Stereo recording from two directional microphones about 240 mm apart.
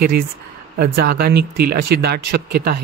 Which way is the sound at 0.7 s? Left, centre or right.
Right.